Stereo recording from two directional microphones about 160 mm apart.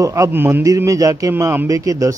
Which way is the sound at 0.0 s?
20° right (ahead or behind).